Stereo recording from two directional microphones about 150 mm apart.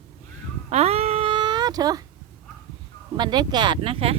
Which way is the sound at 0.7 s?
45° right (ahead or behind).